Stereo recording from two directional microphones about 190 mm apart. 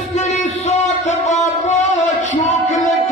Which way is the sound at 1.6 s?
40° left (ahead or behind).